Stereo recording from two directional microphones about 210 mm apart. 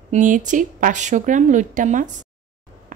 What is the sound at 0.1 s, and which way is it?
Speech, 35° right (ahead or behind).